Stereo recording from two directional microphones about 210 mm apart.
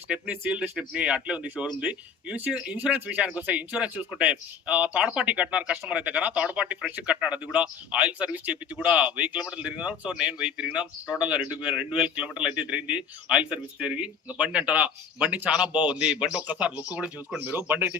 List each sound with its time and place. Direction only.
0.1 s a man's voice: 5° right (ahead or behind)